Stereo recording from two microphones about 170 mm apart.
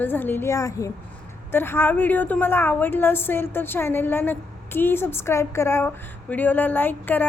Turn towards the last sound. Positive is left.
turn(degrees=10)  # may be behind; listen again after turning